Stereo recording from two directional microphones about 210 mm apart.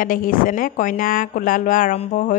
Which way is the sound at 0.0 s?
40° left (ahead or behind).